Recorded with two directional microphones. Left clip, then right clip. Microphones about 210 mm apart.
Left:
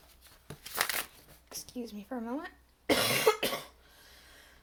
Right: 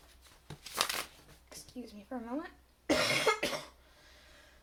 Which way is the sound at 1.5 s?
45° left (ahead or behind).